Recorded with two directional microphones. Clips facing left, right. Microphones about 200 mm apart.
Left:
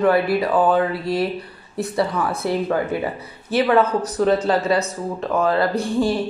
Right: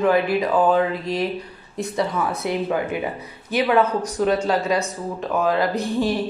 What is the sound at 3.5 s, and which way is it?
Speech, 15° right (ahead or behind).